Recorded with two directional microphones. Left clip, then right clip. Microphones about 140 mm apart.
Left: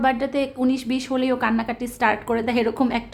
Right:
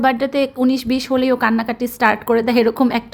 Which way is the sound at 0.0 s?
35° right (ahead or behind).